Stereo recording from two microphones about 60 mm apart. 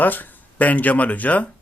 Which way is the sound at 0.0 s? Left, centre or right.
Left.